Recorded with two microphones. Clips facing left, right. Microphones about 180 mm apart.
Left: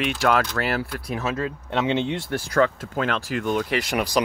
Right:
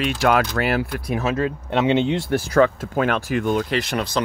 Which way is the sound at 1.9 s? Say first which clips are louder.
Right 6 dB; 90° right.